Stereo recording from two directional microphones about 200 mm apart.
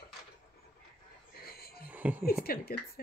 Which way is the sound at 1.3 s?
50° left (ahead or behind).